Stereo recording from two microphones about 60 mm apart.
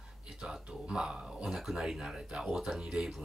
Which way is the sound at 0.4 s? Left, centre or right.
Centre.